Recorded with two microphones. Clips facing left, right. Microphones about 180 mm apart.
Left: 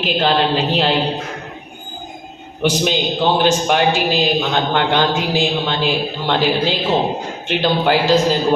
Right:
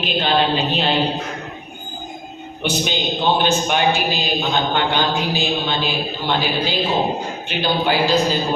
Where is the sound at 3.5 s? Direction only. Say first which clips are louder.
Left 2 dB; 90° left.